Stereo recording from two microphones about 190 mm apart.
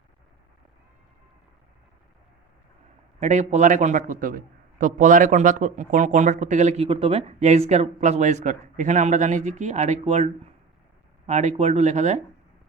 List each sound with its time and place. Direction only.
3.2 s a man's voice: 40° right (ahead or behind)
11.3 s a man's voice: 40° right (ahead or behind)